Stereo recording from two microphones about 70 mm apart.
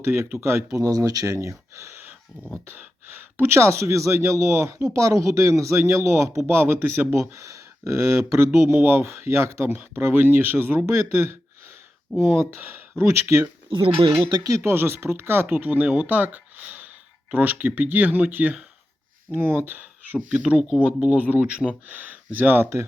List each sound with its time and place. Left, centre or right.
0.0 s a man's voice: right
0.8 s speech: right
3.3 s a man's voice: right
8.7 s a man's voice: right
12.1 s speech: centre
13.0 s a man's voice: right
14.3 s speech: right
14.5 s a man's voice: right
15.5 s speech: right